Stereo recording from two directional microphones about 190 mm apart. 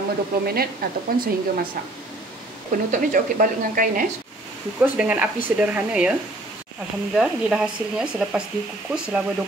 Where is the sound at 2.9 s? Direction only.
45° right (ahead or behind).